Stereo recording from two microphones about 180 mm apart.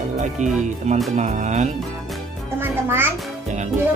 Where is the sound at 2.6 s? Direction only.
15° right (ahead or behind).